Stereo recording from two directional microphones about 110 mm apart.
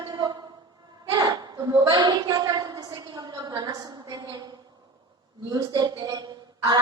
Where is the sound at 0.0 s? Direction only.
35° right (ahead or behind).